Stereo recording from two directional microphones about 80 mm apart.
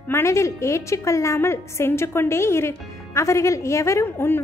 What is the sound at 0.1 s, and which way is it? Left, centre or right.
A woman's voice, left.